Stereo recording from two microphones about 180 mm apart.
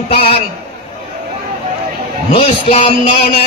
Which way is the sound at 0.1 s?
30° left (ahead or behind).